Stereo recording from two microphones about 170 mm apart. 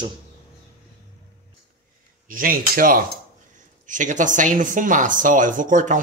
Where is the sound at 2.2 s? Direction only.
55° right (ahead or behind).